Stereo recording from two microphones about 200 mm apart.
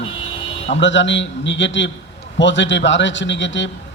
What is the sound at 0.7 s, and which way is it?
A man's voice, 65° left (ahead or behind).